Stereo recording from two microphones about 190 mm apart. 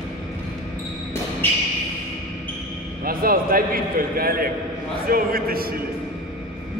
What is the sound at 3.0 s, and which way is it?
A man's voice, 50° right (ahead or behind).